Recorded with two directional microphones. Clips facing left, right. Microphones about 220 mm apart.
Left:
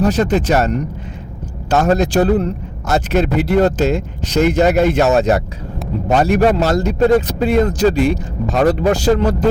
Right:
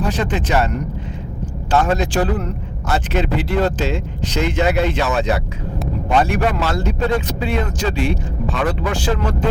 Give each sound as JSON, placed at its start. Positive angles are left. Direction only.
{"t": 0.0, "sound": "speech", "side_deg": 40}
{"t": 1.7, "sound": "a man's voice", "side_deg": 40}